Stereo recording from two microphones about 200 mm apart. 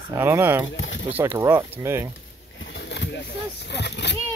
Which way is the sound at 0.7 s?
65° left (ahead or behind).